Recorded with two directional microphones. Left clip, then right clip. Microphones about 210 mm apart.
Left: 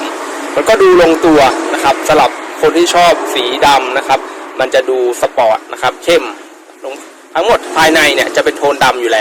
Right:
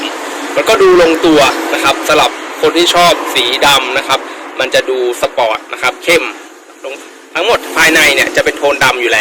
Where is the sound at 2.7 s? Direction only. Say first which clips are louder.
Even; 35° left (ahead or behind).